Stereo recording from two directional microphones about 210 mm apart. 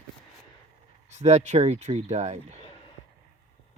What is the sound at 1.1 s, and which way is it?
Speech, 35° right (ahead or behind).